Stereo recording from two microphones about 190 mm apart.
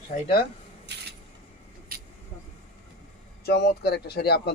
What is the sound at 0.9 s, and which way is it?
Vehicle, 65° right (ahead or behind).